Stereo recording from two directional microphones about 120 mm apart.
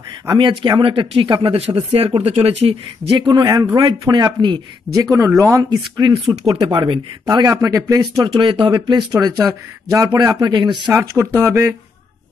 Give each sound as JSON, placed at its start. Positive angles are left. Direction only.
{"t": 0.3, "sound": "speech", "side_deg": -40}
{"t": 2.0, "sound": "speech", "side_deg": -55}
{"t": 3.3, "sound": "speech", "side_deg": -30}
{"t": 4.9, "sound": "speech", "side_deg": -5}
{"t": 5.4, "sound": "speech", "side_deg": -30}
{"t": 10.9, "sound": "speech", "side_deg": -15}